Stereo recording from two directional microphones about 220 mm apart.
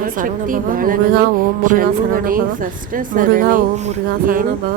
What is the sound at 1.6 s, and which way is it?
Speech, 40° right (ahead or behind).